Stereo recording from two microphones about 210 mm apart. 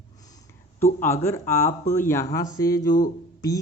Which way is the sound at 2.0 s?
10° left (ahead or behind).